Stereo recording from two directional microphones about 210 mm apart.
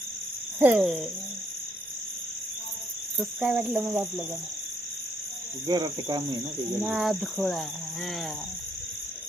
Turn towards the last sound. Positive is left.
turn(degrees=0)  # may be behind; listen again after turning